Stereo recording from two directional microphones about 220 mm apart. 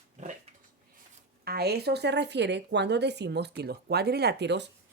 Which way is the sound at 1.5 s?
45° right (ahead or behind).